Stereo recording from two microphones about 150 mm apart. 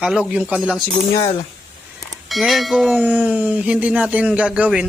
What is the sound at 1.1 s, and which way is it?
Speech, 35° left (ahead or behind).